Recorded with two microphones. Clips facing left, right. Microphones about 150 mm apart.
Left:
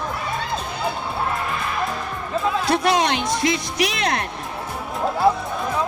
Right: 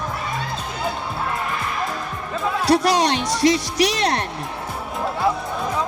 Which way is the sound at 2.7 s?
35° right (ahead or behind).